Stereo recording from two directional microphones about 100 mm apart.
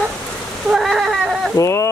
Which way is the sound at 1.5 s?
30° left (ahead or behind).